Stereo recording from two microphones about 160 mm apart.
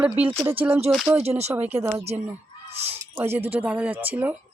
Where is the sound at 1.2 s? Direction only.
40° right (ahead or behind).